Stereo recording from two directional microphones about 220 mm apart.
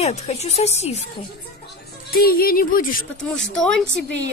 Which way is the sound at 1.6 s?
40° left (ahead or behind).